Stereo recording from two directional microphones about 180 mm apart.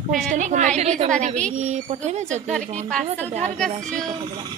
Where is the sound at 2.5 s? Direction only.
5° left (ahead or behind).